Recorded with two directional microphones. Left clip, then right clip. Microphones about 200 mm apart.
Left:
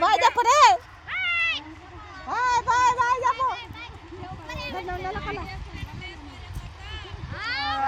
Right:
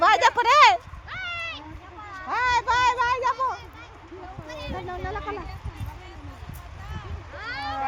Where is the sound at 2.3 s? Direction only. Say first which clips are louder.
Even; 45° left (ahead or behind).